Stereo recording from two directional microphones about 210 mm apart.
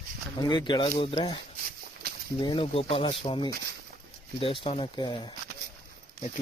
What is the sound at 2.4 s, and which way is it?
Speech, 25° left (ahead or behind).